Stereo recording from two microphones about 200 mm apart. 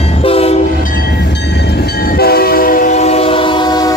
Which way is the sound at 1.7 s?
50° left (ahead or behind).